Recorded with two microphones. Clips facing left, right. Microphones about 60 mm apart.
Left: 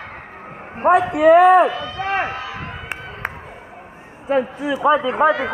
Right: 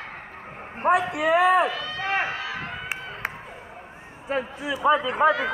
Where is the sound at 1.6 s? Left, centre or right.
Left.